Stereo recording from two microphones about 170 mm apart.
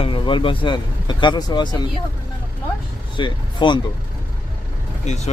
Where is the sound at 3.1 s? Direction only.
30° left (ahead or behind).